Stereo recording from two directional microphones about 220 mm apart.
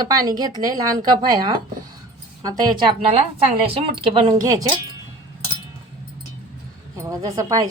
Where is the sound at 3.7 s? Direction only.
20° right (ahead or behind).